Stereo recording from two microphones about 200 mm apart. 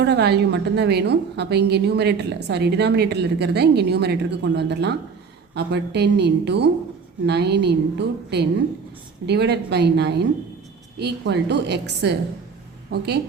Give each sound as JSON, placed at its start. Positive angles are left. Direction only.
{"t": 0.0, "sound": "a woman's voice", "side_deg": -55}